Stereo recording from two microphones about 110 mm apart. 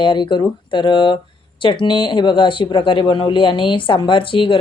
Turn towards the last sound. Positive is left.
turn(degrees=50)  # may be behind; listen again after turning